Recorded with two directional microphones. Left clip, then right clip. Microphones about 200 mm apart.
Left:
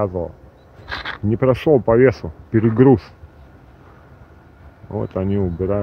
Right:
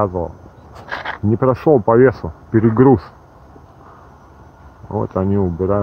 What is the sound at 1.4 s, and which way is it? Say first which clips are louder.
A man's voice: right 1 dB; 5° left (ahead or behind).